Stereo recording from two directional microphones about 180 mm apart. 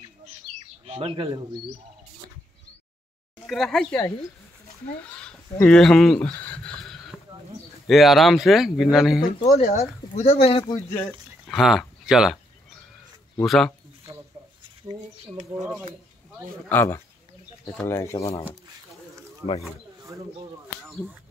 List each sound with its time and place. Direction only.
0.8 s speech: 30° right (ahead or behind)
3.4 s speech: centre (ahead or behind)
5.0 s a sound: 5° left (ahead or behind)
7.8 s speech: centre (ahead or behind)
9.6 s speech: 40° left (ahead or behind)
10.6 s speech: 10° left (ahead or behind)
13.4 s speech: 5° left (ahead or behind)
14.8 s speech: 25° right (ahead or behind)
16.6 s speech: 10° left (ahead or behind)
20.9 s speech: centre (ahead or behind)